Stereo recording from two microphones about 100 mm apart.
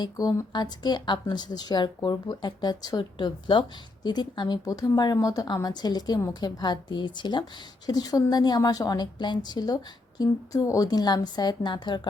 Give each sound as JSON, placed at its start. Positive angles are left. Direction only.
{"t": 0.0, "sound": "a woman's voice", "side_deg": 35}